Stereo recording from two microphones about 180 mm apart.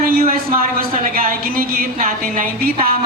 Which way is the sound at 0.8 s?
50° right (ahead or behind).